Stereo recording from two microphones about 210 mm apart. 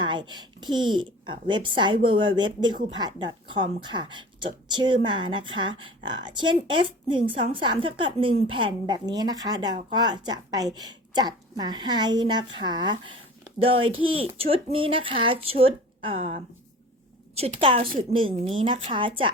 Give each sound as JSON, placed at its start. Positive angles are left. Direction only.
{"t": 0.0, "sound": "a woman's voice", "side_deg": -20}